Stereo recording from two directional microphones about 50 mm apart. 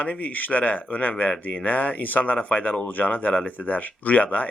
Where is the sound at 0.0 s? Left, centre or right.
Left.